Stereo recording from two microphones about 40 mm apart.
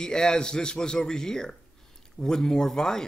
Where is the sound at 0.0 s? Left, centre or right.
Centre.